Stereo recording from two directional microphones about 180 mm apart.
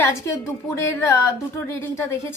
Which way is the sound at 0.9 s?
15° left (ahead or behind).